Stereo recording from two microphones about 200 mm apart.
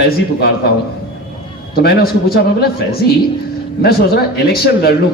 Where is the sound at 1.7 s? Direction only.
50° left (ahead or behind).